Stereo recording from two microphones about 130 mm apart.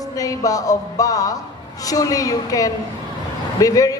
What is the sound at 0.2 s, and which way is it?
A woman's voice, 25° left (ahead or behind).